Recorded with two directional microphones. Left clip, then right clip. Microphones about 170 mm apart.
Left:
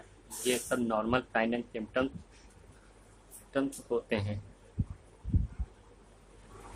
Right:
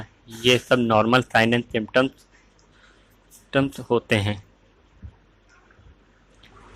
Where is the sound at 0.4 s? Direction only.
30° right (ahead or behind).